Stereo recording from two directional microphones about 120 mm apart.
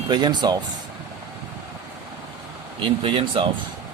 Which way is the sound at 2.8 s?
45° right (ahead or behind).